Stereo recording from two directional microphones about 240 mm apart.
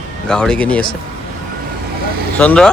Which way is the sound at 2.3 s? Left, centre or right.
Centre.